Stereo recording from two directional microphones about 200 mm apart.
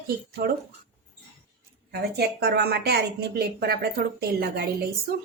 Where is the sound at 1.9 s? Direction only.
55° right (ahead or behind).